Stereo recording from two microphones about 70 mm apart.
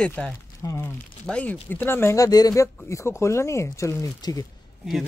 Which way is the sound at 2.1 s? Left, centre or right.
Left.